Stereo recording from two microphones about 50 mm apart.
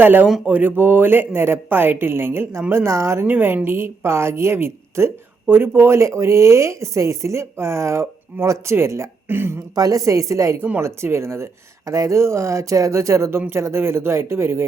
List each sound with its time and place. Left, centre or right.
0.0 s a woman's voice: right
3.2 s a woman's voice: right
9.3 s a woman's voice: right
10.0 s a woman's voice: right
10.8 s speech: right
11.9 s speech: right
13.5 s a woman's voice: right